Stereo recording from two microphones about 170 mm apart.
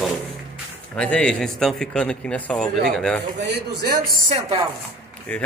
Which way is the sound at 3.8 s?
60° right (ahead or behind).